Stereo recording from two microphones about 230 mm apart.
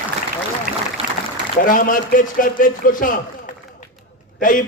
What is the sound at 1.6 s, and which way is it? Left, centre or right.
A man's voice, left.